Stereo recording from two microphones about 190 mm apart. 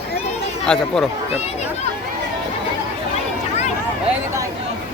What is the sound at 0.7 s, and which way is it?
Speech, 5° left (ahead or behind).